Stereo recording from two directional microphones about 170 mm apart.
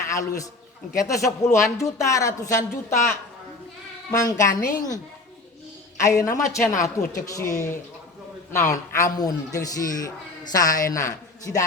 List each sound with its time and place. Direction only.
0.1 s a man's voice: 20° left (ahead or behind)
6.0 s a man's voice: 20° left (ahead or behind)
8.5 s a man's voice: 15° left (ahead or behind)